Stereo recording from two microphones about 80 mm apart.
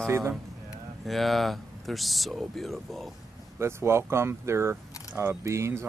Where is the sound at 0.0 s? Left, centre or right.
Right.